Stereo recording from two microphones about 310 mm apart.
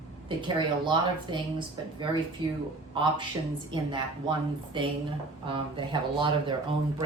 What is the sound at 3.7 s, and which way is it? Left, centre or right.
Speech, centre.